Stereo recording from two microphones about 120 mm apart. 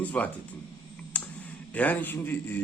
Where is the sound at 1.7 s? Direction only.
15° left (ahead or behind).